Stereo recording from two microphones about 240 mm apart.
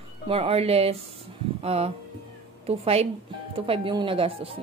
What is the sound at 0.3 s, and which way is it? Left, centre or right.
A woman's voice, right.